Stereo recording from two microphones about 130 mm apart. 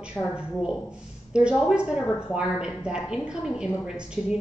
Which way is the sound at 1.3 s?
5° right (ahead or behind).